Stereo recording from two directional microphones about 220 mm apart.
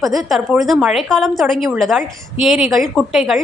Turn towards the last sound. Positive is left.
turn(degrees=0)  # may be behind; listen again after turning